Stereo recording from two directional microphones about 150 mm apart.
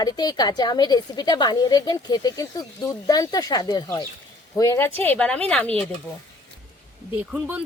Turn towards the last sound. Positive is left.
turn(degrees=-10)  # may be behind; listen again after turning